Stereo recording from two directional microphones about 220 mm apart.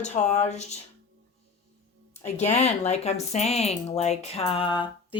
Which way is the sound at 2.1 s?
30° left (ahead or behind).